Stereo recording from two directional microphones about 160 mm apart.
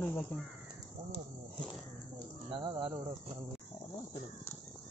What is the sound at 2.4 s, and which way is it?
Speech, 30° right (ahead or behind).